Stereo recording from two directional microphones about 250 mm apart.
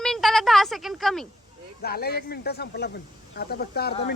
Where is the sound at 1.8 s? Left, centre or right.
Left.